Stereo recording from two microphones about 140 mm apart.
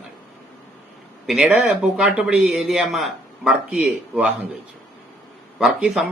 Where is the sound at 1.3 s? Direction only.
10° right (ahead or behind).